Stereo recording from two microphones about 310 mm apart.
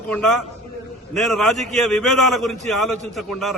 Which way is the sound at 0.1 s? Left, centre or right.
Centre.